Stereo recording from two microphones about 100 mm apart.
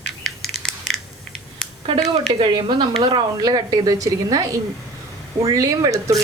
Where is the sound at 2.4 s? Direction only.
50° right (ahead or behind).